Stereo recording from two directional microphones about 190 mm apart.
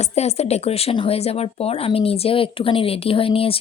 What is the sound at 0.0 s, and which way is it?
Speech, 35° left (ahead or behind).